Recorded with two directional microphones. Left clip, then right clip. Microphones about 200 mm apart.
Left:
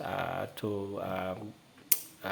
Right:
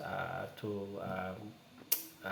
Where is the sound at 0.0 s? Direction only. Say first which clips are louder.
Left 5 dB; 40° left (ahead or behind).